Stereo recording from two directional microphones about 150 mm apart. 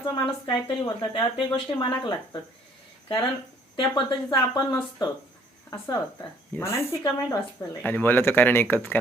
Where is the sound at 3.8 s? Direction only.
30° left (ahead or behind).